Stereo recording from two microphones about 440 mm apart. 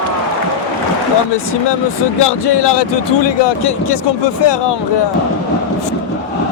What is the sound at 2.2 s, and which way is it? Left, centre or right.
Speech, left.